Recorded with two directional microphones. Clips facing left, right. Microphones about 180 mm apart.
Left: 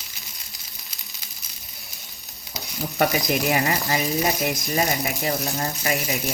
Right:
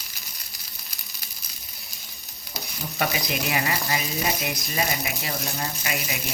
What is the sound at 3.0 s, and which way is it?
Speech, 40° left (ahead or behind).